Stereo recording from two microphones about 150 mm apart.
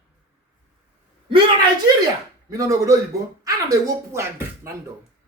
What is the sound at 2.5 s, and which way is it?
Speech, 20° right (ahead or behind).